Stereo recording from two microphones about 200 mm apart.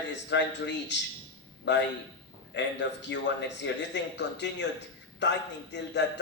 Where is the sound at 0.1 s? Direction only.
60° left (ahead or behind).